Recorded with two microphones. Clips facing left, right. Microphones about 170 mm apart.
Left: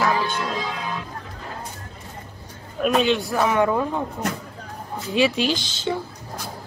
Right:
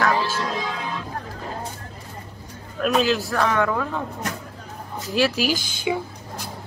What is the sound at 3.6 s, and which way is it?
Speech, 20° left (ahead or behind).